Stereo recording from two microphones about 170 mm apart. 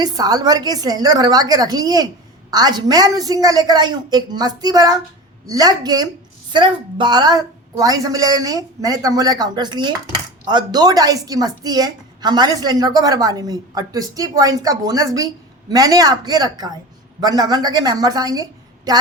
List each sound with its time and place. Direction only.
0.0 s a woman's voice: 20° right (ahead or behind)